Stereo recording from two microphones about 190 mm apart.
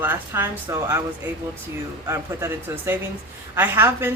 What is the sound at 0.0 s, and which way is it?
A woman's voice, 10° right (ahead or behind).